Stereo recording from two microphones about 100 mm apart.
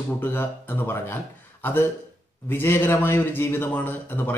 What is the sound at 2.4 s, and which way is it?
A man's voice, 20° left (ahead or behind).